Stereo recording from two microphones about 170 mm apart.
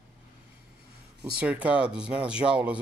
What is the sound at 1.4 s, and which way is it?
Speech, 5° right (ahead or behind).